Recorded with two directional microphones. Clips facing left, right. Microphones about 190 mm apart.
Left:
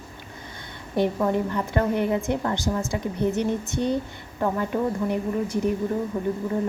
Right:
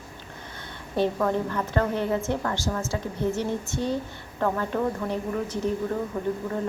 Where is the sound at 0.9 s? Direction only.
15° left (ahead or behind).